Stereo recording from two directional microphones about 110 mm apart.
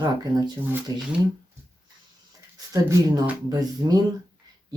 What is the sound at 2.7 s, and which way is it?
Speech, 30° right (ahead or behind).